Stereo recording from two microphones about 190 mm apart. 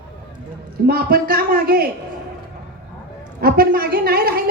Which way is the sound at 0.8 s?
55° right (ahead or behind).